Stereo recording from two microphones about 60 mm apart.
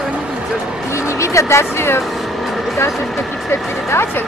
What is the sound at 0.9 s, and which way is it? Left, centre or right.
Music, left.